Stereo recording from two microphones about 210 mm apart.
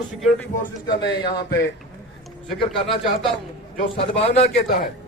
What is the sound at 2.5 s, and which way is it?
Speech, centre (ahead or behind).